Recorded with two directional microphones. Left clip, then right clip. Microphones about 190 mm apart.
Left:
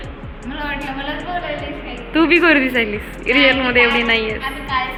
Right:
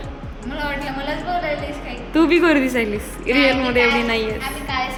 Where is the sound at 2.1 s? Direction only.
15° right (ahead or behind).